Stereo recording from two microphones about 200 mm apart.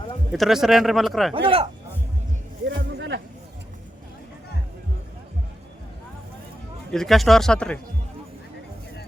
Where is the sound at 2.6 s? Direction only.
60° right (ahead or behind).